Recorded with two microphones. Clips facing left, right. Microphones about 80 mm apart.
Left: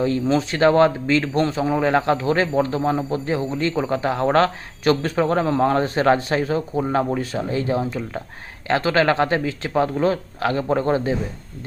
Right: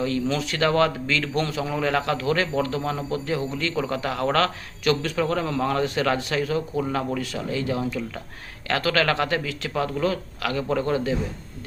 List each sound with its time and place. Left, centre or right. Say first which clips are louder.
0.0 s a man's voice: left 5 dB; left